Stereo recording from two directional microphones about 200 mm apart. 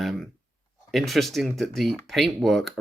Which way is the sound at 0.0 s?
Centre (ahead or behind).